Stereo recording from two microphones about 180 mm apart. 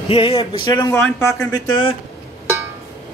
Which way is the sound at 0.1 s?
30° left (ahead or behind).